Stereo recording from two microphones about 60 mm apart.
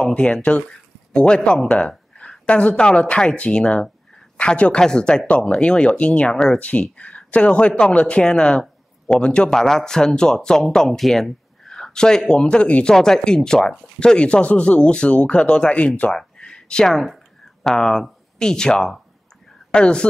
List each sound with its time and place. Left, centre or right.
0.0 s speech: centre
16.1 s a sound: centre
17.6 s speech: centre